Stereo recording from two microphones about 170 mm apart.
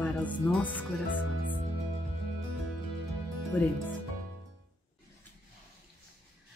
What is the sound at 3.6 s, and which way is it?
Speech, 10° left (ahead or behind).